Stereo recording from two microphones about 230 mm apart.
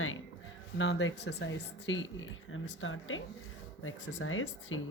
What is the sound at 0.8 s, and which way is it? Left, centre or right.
Speech, left.